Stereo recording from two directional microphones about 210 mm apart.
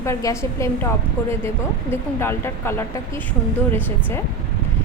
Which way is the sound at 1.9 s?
10° left (ahead or behind).